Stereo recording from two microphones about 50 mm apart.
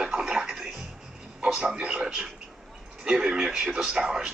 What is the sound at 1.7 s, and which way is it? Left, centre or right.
Speech, centre.